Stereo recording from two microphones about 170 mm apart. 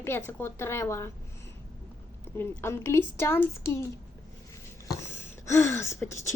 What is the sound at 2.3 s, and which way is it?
Speech, 15° left (ahead or behind).